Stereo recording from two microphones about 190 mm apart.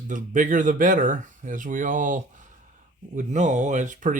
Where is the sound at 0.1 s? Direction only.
45° right (ahead or behind).